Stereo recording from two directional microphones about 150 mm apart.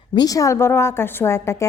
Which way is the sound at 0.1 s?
25° left (ahead or behind).